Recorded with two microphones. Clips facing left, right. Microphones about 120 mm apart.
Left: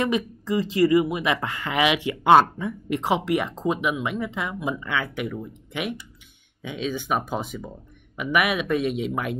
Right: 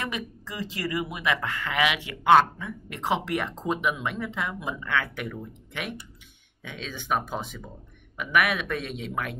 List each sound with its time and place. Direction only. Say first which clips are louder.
0.0 s speech: left 9 dB; 20° left (ahead or behind)
2.9 s speech: left 4 dB; 10° left (ahead or behind)